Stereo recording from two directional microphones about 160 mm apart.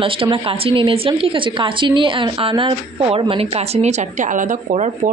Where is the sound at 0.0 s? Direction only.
35° right (ahead or behind).